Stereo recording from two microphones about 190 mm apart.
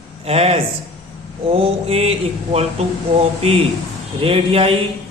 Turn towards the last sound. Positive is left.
turn(degrees=-30)  # may be behind; listen again after turning